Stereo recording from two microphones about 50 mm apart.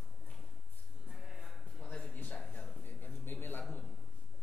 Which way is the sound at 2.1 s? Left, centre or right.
Left.